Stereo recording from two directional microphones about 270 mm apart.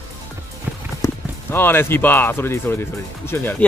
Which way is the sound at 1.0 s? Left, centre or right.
Centre.